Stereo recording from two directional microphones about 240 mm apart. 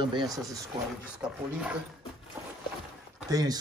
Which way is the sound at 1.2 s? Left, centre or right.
Centre.